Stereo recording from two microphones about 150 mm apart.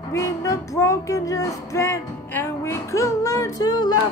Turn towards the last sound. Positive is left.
turn(degrees=25)  # may be behind; listen again after turning